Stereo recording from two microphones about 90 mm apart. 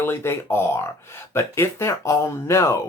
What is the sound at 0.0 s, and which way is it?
Speech, 25° left (ahead or behind).